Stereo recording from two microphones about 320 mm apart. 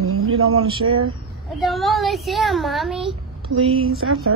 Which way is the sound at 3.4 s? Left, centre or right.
Centre.